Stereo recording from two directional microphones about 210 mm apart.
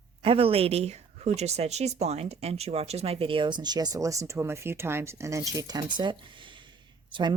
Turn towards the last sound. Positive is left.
turn(degrees=-20)  # may be behind; listen again after turning